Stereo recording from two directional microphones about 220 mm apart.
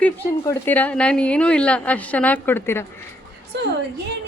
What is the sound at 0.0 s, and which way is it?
A woman's voice, 10° left (ahead or behind).